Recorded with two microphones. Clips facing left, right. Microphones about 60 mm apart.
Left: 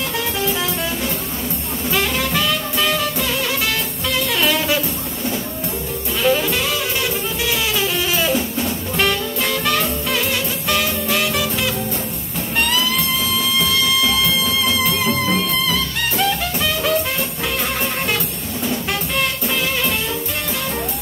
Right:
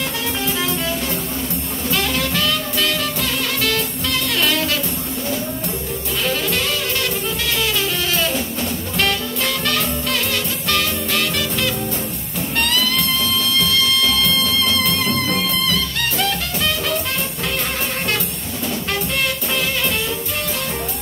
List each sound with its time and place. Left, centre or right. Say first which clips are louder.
1.9 s music: left 1 dB; centre
6.2 s music: left 5 dB; centre
8.1 s jazz: left 2 dB; centre
10.3 s music: left 1 dB; centre